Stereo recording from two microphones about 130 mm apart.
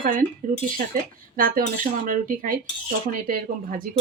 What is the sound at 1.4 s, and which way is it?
Speech, 90° right.